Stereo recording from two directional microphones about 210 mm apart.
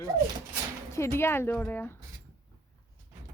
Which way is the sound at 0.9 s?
10° left (ahead or behind).